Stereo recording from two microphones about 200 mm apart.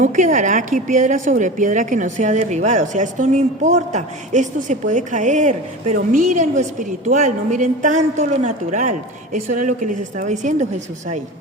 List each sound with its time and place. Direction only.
0.0 s a woman's voice: 40° right (ahead or behind)